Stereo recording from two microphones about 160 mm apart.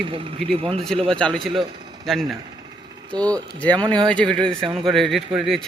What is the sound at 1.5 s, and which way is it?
Speech, 30° right (ahead or behind).